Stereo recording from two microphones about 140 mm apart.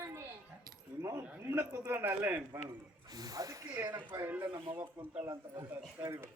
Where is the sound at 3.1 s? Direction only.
25° right (ahead or behind).